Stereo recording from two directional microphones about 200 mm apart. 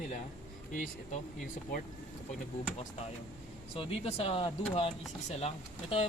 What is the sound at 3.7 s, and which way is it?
Speech, 30° left (ahead or behind).